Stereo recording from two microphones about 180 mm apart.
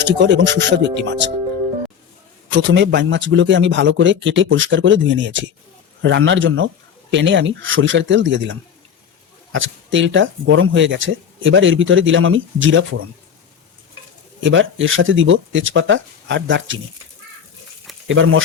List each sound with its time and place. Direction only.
0.0 s speech: 75° right (ahead or behind)
2.5 s speech: 75° right (ahead or behind)
14.4 s speech: 90° right
18.1 s speech: 90° right